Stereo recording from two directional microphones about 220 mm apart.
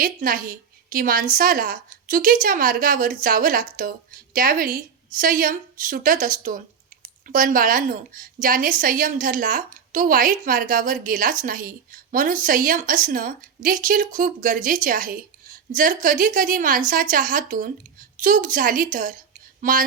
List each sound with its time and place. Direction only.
0.0 s a woman's voice: 40° right (ahead or behind)